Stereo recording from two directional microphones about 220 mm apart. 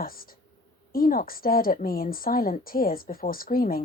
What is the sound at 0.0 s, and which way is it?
A woman's voice, 40° left (ahead or behind).